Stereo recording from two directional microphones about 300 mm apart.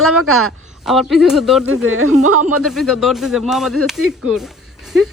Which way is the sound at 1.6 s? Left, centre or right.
Right.